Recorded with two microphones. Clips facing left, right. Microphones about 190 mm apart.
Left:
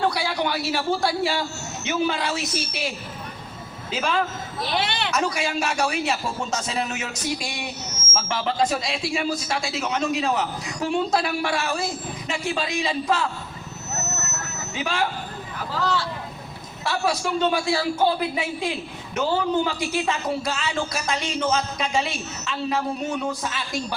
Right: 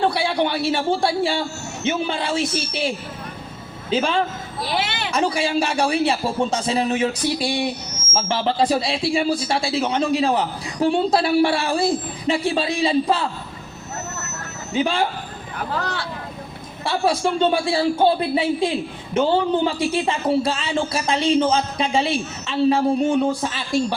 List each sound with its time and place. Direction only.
0.0 s a man's voice: 30° right (ahead or behind)
14.7 s speech: 30° right (ahead or behind)
15.7 s speech: 60° right (ahead or behind)
16.8 s a man's voice: 30° right (ahead or behind)